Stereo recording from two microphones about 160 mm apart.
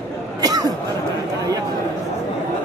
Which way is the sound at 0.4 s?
25° right (ahead or behind).